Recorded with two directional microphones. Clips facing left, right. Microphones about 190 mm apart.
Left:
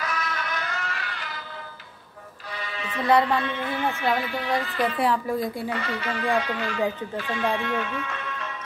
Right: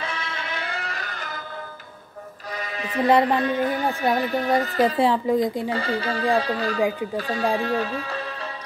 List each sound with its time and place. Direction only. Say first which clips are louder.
0.0 s music: left 1 dB; 30° right (ahead or behind); by 1.4 s 45° right (ahead or behind)
2.5 s music: right 4 dB; 40° right (ahead or behind)
3.3 s speech: right 5 dB; 40° right (ahead or behind)
4.9 s speech: right 5 dB; 25° right (ahead or behind)
5.7 s speech: right 4 dB; 30° right (ahead or behind)